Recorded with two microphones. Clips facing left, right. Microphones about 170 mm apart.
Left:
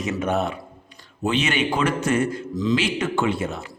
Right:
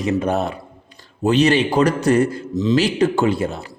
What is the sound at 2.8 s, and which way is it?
Speech, 35° right (ahead or behind).